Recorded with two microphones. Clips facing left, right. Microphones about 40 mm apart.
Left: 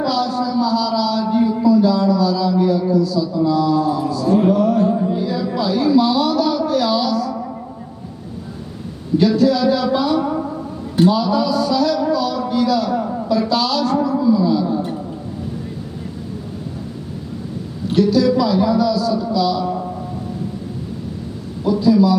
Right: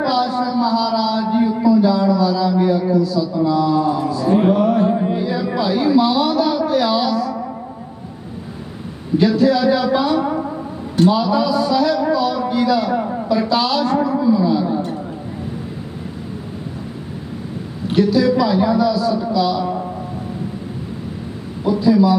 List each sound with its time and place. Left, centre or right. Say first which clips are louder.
0.0 s a sound: right 1 dB; right
3.0 s speech: even; centre; by 5.2 s right
5.2 s a sound: right 1 dB; right
5.5 s a woman's voice: even; centre
9.1 s a man's voice: even; centre; by 13.1 s right
13.3 s a woman's voice: right 1 dB; centre
17.8 s a man's voice: even; centre
21.6 s speech: even; centre